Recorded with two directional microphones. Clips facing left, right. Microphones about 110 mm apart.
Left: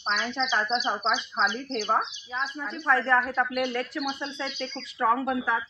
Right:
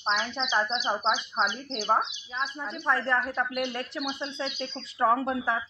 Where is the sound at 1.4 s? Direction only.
25° right (ahead or behind).